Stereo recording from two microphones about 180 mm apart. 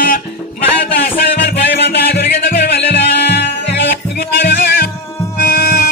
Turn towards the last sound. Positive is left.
turn(degrees=55)  # may be behind; listen again after turning